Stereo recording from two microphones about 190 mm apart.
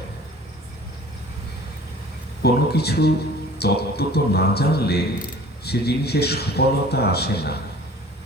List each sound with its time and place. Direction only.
2.4 s a man's voice: 55° left (ahead or behind)